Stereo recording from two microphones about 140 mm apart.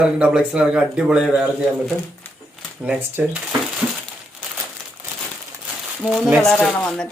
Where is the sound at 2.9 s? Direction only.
10° right (ahead or behind).